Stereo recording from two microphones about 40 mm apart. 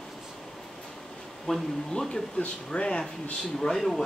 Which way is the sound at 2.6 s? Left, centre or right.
Left.